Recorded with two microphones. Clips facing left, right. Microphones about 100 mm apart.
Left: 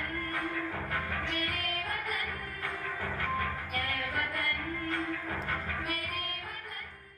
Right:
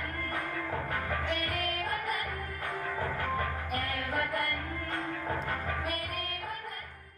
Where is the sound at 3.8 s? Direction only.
15° right (ahead or behind).